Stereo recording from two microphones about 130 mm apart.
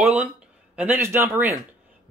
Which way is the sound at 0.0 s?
10° right (ahead or behind).